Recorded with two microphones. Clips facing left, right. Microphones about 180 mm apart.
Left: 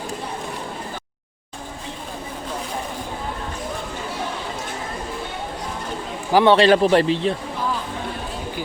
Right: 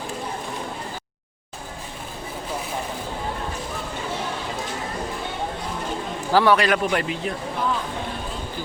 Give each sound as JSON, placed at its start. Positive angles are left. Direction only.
{"t": 6.3, "sound": "a man's voice", "side_deg": 25}